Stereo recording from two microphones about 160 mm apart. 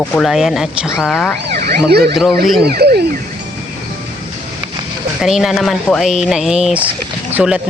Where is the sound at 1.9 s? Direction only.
85° right.